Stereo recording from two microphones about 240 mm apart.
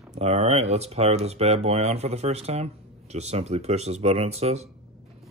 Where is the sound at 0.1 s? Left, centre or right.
Right.